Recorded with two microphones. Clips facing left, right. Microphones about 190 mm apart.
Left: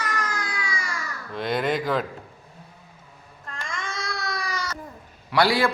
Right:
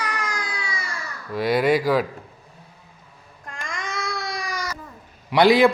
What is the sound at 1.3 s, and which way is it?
Speech, 5° right (ahead or behind).